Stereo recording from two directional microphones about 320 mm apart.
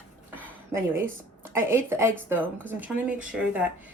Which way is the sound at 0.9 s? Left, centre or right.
Centre.